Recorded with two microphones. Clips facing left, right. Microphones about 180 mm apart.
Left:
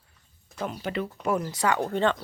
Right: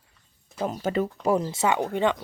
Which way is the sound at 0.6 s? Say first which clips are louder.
Right 5 dB; 40° right (ahead or behind).